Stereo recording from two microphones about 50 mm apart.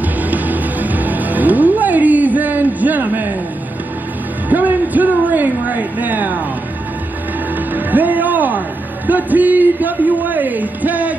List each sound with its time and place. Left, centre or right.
0.0 s music: right
4.5 s a sound: right
7.5 s music: right